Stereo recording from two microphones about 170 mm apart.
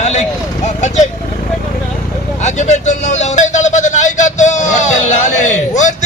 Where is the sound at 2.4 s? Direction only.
45° left (ahead or behind).